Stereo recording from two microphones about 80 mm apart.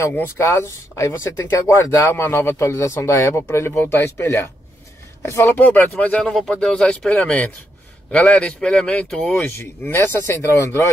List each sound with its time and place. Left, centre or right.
0.4 s speech: left
4.0 s speech: left
5.7 s speech: centre
9.4 s speech: left